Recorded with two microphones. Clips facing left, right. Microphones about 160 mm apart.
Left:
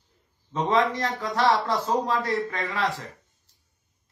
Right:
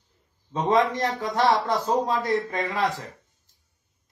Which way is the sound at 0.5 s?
20° right (ahead or behind).